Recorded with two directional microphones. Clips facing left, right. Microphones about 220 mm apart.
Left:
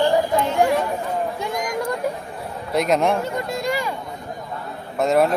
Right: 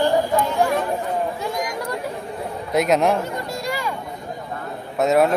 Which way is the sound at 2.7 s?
Centre (ahead or behind).